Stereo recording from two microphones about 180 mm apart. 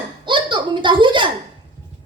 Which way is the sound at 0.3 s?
25° right (ahead or behind).